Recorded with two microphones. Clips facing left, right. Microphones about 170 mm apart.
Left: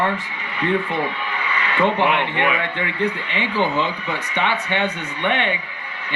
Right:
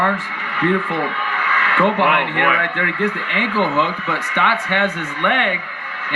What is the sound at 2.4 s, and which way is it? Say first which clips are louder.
Speech: right 2 dB; 25° left (ahead or behind).